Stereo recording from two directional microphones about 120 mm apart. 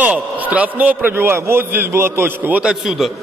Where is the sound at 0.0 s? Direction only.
15° right (ahead or behind).